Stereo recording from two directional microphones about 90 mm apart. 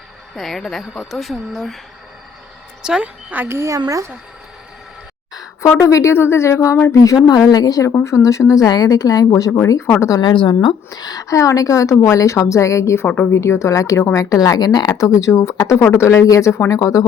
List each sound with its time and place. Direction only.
0.3 s speech: 5° left (ahead or behind)
2.8 s a woman's voice: 10° right (ahead or behind)
3.8 s speech: 35° right (ahead or behind)
5.3 s a sound: 45° left (ahead or behind)
5.7 s a woman's voice: 35° left (ahead or behind)
7.9 s speech: 25° left (ahead or behind)
8.1 s a woman's voice: 35° left (ahead or behind)
10.2 s a woman's voice: 60° left (ahead or behind); by 17.1 s 40° left (ahead or behind)